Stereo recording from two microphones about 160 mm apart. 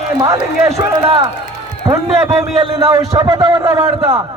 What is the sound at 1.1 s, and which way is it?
A man's voice, 35° right (ahead or behind).